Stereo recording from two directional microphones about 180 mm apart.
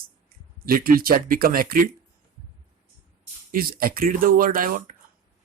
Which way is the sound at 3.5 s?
55° right (ahead or behind).